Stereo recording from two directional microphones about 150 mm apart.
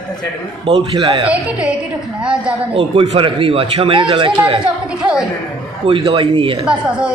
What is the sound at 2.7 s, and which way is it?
A man's voice, 35° right (ahead or behind).